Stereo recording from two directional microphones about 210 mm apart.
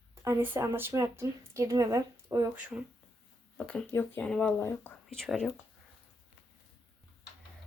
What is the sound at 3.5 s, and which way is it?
Speech, 5° left (ahead or behind).